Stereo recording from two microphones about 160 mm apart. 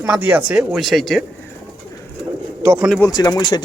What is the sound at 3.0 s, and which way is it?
Speech, 25° left (ahead or behind).